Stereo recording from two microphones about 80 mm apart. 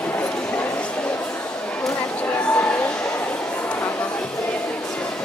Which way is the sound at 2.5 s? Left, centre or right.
Centre.